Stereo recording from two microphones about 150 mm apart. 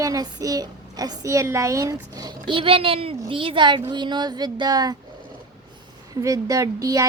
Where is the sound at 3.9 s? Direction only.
30° right (ahead or behind).